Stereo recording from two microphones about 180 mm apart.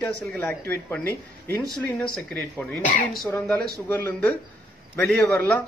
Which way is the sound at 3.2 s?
10° left (ahead or behind).